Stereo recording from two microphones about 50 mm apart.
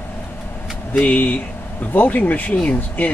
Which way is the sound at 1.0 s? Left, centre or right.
Left.